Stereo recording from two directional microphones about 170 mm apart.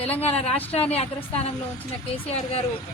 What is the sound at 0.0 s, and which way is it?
Speech, 35° left (ahead or behind).